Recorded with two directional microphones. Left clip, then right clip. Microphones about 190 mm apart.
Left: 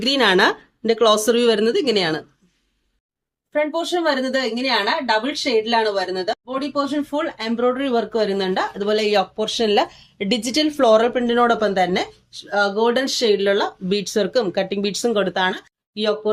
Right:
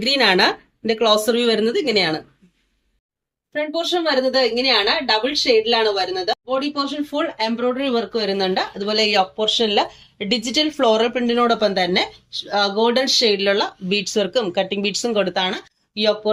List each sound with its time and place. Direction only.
0.0 s speech: 45° left (ahead or behind)
3.5 s a woman's voice: 20° left (ahead or behind)